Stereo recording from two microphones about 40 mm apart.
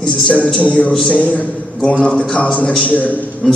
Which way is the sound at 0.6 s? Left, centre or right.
Left.